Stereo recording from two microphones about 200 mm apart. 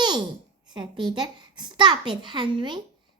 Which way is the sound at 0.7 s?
25° right (ahead or behind).